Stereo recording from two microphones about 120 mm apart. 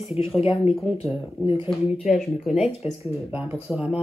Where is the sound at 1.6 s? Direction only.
Centre (ahead or behind).